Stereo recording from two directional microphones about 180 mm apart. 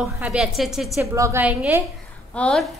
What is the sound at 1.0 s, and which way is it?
Speech, 15° right (ahead or behind).